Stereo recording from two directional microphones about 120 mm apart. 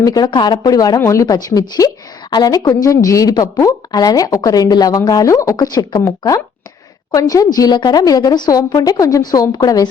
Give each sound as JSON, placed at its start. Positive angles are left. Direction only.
{"t": 0.0, "sound": "a woman's voice", "side_deg": 35}